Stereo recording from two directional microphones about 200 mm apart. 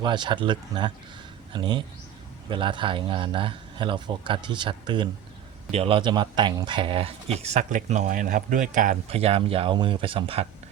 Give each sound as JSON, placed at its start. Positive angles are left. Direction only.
{"t": 0.0, "sound": "speech", "side_deg": -25}